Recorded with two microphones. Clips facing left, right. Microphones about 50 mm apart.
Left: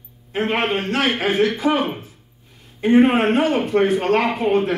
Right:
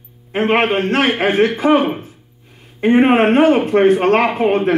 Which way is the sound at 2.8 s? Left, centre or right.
Right.